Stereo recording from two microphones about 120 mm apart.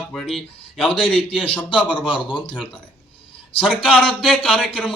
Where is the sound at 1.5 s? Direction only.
10° left (ahead or behind).